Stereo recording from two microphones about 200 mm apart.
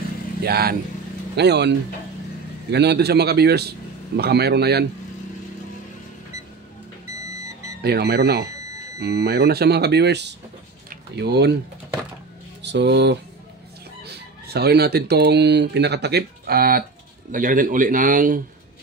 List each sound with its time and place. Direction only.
0.4 s a man's voice: 50° right (ahead or behind)
7.8 s a man's voice: 55° right (ahead or behind)
12.6 s a man's voice: 60° right (ahead or behind); by 18.4 s 40° right (ahead or behind)